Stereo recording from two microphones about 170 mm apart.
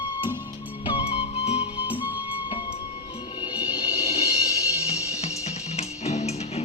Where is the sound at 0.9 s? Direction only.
35° left (ahead or behind).